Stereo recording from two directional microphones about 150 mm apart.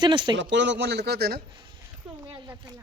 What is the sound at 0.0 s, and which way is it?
Speech, 30° right (ahead or behind).